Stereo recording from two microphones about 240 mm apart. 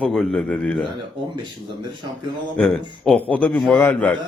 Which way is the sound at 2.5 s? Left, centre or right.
Centre.